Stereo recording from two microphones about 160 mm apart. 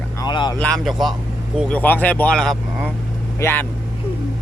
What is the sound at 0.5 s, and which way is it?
Speech, 5° left (ahead or behind).